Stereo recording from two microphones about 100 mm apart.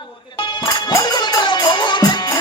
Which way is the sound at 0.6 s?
45° left (ahead or behind).